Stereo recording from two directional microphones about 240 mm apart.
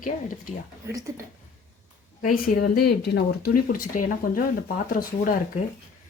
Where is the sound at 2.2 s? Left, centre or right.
Left.